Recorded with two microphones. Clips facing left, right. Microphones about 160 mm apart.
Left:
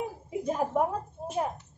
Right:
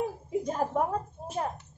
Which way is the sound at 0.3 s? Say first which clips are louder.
Left 2 dB; 5° left (ahead or behind).